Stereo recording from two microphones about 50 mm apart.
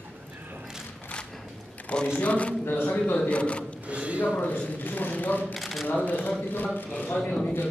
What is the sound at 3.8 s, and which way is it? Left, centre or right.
Speech, right.